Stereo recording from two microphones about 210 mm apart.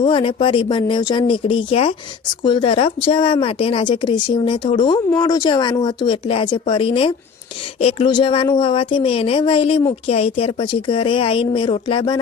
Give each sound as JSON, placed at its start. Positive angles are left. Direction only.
{"t": 0.0, "sound": "a woman's voice", "side_deg": 25}